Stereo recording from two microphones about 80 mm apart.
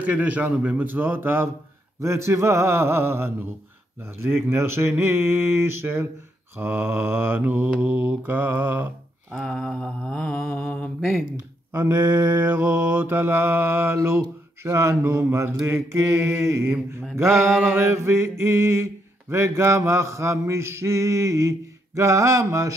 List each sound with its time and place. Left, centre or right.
0.0 s mantra: centre
2.0 s mantra: right
9.3 s mantra: centre
11.0 s speech: centre
11.3 s mantra: right